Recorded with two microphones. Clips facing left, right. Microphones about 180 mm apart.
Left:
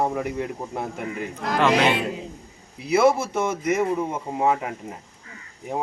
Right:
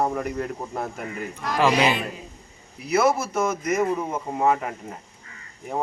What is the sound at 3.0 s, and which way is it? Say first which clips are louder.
Speech: left 5 dB; 30° left (ahead or behind).